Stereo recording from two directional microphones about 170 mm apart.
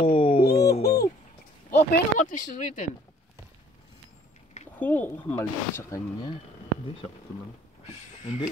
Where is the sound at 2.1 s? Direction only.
50° left (ahead or behind).